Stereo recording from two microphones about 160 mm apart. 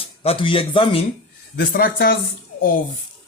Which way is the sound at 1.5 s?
70° left (ahead or behind).